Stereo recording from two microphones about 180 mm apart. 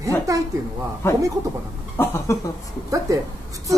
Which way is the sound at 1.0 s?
15° left (ahead or behind).